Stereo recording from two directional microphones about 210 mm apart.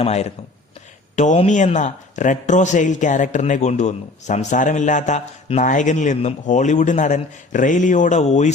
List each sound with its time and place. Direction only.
0.0 s speech: 30° left (ahead or behind)